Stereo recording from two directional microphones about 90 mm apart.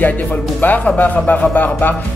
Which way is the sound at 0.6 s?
20° left (ahead or behind).